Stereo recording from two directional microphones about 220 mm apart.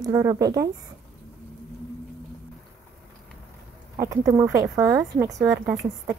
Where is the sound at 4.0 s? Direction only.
15° right (ahead or behind).